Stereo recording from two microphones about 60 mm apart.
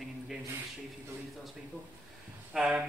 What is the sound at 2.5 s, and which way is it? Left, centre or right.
Speech, centre.